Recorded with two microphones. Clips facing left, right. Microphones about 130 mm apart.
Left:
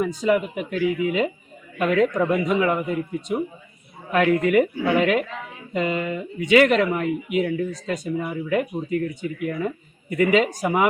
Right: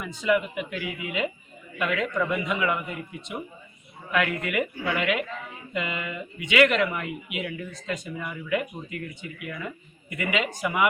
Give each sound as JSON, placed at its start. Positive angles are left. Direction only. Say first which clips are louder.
{"t": 0.0, "sound": "speech", "louder": "left 4 dB", "side_deg": 40}